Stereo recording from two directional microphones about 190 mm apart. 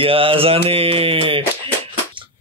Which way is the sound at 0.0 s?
30° right (ahead or behind).